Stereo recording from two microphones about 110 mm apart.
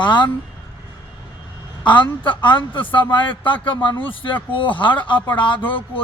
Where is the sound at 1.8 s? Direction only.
45° left (ahead or behind).